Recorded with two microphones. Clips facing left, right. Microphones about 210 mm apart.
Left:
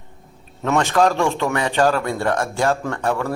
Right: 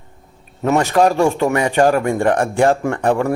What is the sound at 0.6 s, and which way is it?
Speech, 10° right (ahead or behind).